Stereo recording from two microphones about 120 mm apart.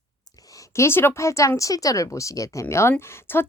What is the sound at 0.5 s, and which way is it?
A woman's voice, 25° left (ahead or behind).